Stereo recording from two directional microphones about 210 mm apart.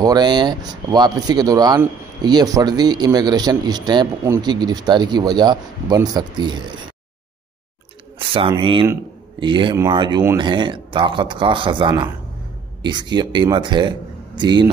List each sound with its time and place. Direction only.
0.0 s speech: 20° right (ahead or behind)
8.2 s speech: 25° right (ahead or behind)